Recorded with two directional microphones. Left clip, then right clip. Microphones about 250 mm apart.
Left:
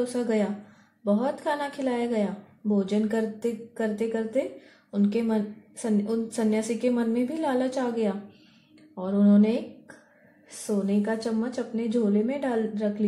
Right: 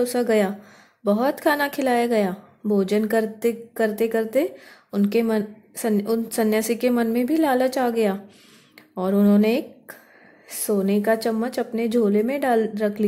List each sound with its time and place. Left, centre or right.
0.1 s a woman's voice: right
10.7 s a woman's voice: right